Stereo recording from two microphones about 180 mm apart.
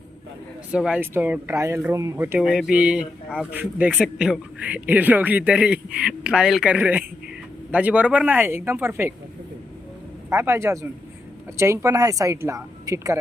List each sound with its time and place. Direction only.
0.7 s speech: 5° right (ahead or behind)
10.2 s speech: 15° right (ahead or behind)